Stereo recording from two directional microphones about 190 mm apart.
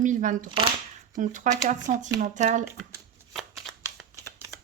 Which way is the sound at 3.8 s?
15° right (ahead or behind).